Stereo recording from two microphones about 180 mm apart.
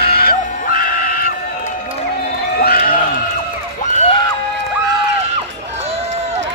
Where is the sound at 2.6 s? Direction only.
55° left (ahead or behind).